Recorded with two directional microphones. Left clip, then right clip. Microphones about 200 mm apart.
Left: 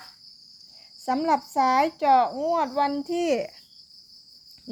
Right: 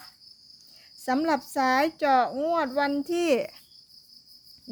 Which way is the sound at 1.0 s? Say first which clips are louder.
Left 2 dB; 25° right (ahead or behind).